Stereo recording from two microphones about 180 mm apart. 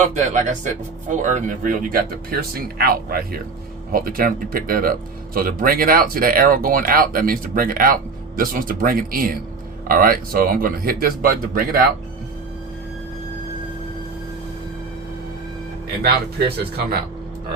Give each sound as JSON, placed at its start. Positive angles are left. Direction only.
{"t": 0.0, "sound": "speech", "side_deg": -40}
{"t": 16.0, "sound": "speech", "side_deg": -60}